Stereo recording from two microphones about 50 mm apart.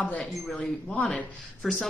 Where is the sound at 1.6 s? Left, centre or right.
Centre.